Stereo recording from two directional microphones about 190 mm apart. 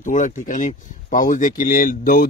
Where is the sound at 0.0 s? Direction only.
40° left (ahead or behind).